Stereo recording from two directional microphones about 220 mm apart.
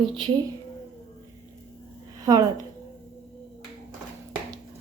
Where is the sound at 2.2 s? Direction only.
15° right (ahead or behind).